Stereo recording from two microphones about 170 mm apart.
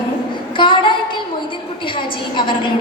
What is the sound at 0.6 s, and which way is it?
A woman's voice, 30° left (ahead or behind).